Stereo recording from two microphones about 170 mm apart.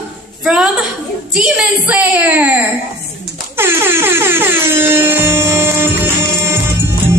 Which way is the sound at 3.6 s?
15° right (ahead or behind).